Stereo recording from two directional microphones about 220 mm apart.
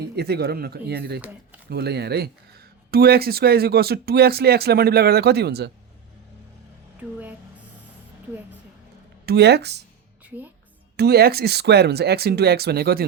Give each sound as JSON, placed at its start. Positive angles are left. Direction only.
{"t": 0.0, "sound": "speech", "side_deg": -45}
{"t": 9.2, "sound": "speech", "side_deg": -45}
{"t": 10.2, "sound": "a woman's voice", "side_deg": -5}
{"t": 10.9, "sound": "speech", "side_deg": -45}